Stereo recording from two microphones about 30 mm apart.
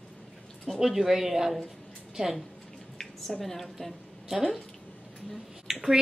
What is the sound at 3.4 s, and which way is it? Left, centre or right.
Speech, centre.